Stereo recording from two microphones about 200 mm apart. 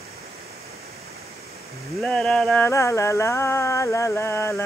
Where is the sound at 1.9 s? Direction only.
5° left (ahead or behind).